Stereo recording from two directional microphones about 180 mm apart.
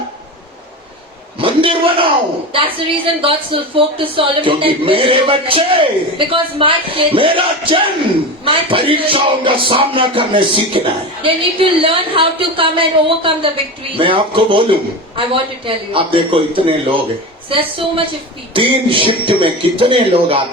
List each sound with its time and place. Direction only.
1.4 s a woman's voice: 30° right (ahead or behind)